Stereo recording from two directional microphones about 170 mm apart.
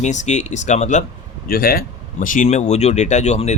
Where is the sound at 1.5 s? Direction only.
65° left (ahead or behind).